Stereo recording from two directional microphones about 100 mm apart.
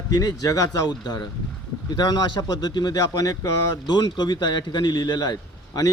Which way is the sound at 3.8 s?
45° left (ahead or behind).